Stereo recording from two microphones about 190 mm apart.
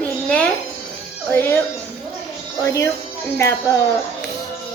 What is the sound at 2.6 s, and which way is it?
Speech, 15° left (ahead or behind).